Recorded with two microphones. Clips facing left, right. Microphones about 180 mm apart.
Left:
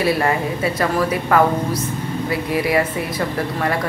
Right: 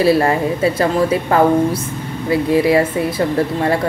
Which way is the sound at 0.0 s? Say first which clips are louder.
Right 5 dB; 30° right (ahead or behind).